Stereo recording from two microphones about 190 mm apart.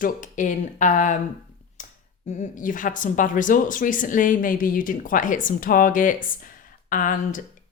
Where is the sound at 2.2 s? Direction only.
40° left (ahead or behind).